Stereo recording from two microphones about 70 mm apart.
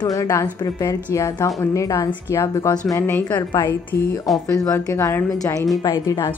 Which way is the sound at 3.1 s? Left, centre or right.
Left.